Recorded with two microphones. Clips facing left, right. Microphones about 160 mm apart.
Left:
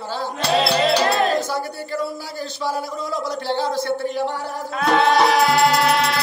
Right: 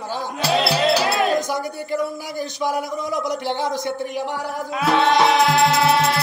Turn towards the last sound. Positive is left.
turn(degrees=-25)  # may be behind; listen again after turning